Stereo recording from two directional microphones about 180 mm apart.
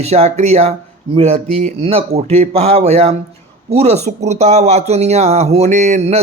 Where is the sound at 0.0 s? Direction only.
35° right (ahead or behind).